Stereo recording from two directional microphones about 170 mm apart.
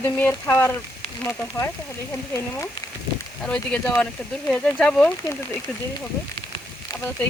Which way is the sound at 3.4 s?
5° left (ahead or behind).